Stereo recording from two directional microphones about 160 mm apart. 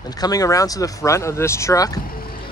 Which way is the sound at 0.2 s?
25° left (ahead or behind).